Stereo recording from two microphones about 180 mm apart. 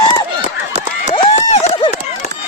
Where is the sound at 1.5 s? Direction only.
35° left (ahead or behind).